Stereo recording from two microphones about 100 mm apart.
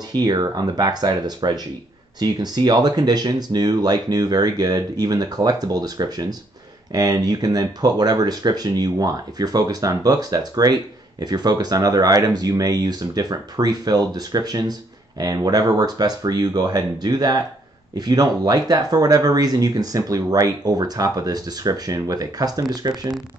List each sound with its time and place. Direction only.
0.1 s speech: 40° right (ahead or behind)